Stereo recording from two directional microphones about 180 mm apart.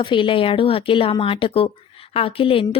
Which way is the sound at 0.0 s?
25° left (ahead or behind).